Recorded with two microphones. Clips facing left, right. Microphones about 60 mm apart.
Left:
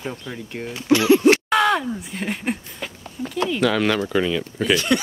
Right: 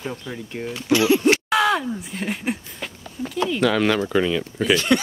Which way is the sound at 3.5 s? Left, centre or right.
Centre.